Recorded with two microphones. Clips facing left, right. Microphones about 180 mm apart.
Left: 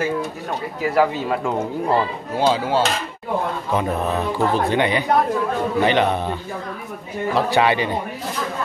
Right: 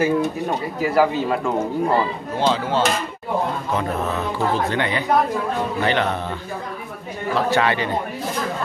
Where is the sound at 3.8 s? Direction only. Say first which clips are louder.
Left 2 dB; 15° left (ahead or behind).